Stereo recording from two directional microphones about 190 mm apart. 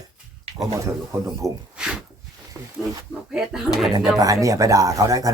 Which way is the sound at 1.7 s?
5° right (ahead or behind).